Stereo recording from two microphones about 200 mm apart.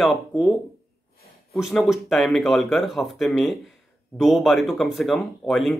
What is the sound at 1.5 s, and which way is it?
Speech, centre (ahead or behind).